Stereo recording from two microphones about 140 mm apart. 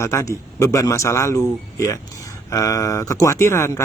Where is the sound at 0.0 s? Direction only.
20° left (ahead or behind).